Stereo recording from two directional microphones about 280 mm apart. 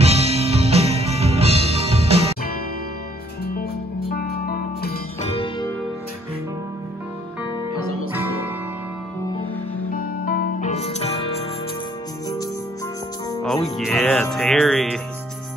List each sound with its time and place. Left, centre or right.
0.0 s music: right
4.1 s music: left
5.3 s music: centre
8.1 s music: centre
9.9 s music: left
13.4 s music: centre